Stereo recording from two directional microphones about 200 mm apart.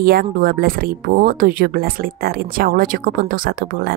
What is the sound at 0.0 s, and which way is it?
Speech, 50° right (ahead or behind).